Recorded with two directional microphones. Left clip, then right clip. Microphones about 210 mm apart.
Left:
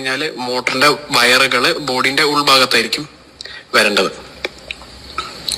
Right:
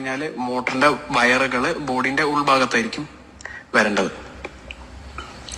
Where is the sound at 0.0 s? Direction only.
Centre (ahead or behind).